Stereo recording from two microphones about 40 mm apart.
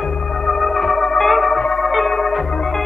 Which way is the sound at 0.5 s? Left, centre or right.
Centre.